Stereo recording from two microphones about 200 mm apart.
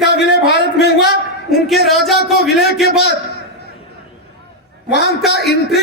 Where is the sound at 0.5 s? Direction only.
55° left (ahead or behind).